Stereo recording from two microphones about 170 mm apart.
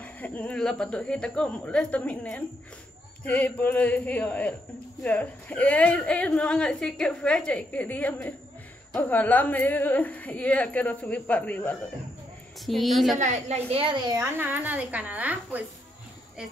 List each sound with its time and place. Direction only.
0.0 s a woman's voice: 10° left (ahead or behind)
13.2 s a child's voice: 45° right (ahead or behind)
14.1 s a woman's voice: 10° right (ahead or behind)